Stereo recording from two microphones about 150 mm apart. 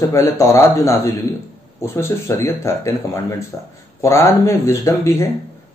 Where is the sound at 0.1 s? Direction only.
20° left (ahead or behind).